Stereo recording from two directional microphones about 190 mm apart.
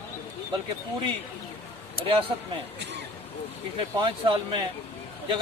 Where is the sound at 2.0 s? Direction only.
30° right (ahead or behind).